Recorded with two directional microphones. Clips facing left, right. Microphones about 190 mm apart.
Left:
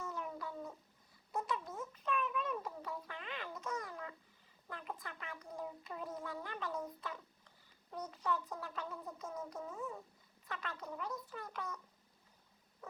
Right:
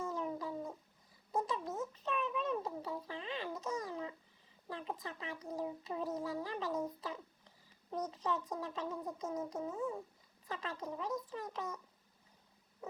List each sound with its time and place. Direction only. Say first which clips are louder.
0.0 s cat: right 5 dB; 30° right (ahead or behind)
1.3 s a sound: right 3 dB; 30° right (ahead or behind)
4.7 s a child's voice: right 4 dB; 25° right (ahead or behind)